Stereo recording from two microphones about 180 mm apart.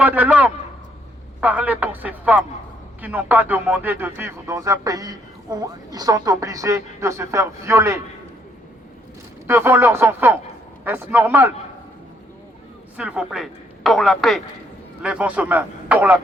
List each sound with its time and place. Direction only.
0.0 s speech: 10° right (ahead or behind)
9.5 s speech: 10° right (ahead or behind)
13.0 s a woman's voice: 5° right (ahead or behind)